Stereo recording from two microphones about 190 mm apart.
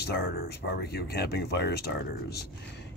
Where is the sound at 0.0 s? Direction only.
55° left (ahead or behind).